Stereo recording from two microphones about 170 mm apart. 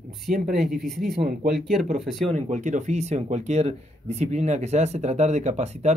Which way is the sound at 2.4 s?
45° right (ahead or behind).